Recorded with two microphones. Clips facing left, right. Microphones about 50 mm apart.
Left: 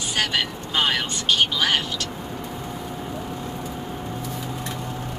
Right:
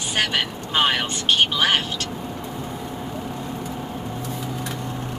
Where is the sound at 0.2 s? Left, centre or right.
Right.